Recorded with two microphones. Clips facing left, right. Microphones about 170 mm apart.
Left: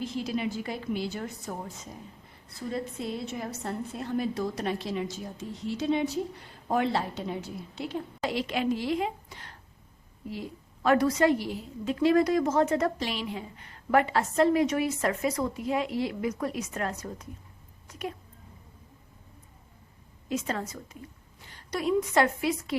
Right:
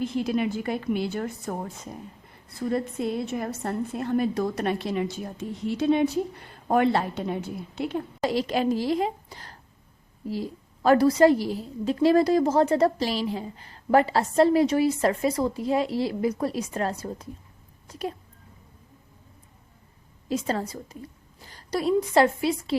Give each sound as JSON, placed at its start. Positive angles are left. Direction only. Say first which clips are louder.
{"t": 0.0, "sound": "a woman's voice", "louder": "right 5 dB", "side_deg": -55}
{"t": 8.3, "sound": "a woman's voice", "louder": "right 4 dB", "side_deg": -40}
{"t": 20.2, "sound": "a woman's voice", "louder": "right 4 dB", "side_deg": -35}